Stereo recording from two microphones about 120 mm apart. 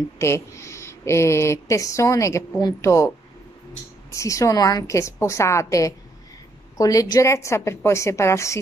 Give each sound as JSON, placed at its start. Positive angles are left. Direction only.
{"t": 0.2, "sound": "speech", "side_deg": 25}
{"t": 4.1, "sound": "speech", "side_deg": 25}